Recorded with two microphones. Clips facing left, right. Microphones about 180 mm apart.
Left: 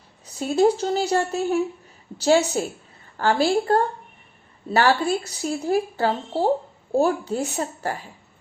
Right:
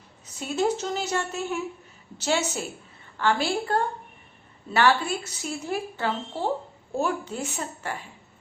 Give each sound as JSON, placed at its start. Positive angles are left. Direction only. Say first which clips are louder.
{"t": 0.3, "sound": "a woman's voice", "louder": "left 7 dB", "side_deg": 35}